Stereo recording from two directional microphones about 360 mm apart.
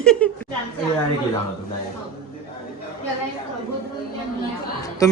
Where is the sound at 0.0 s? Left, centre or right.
Centre.